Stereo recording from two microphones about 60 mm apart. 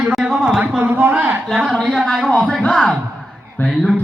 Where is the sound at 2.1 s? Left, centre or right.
Centre.